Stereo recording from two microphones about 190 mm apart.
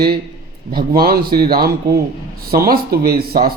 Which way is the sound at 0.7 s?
50° right (ahead or behind).